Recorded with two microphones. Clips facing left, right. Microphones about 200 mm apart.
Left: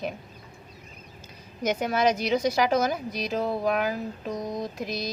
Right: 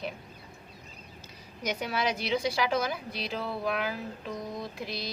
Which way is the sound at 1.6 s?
45° left (ahead or behind).